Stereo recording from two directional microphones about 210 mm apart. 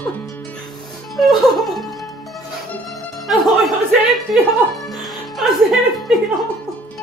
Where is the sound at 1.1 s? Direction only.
Centre (ahead or behind).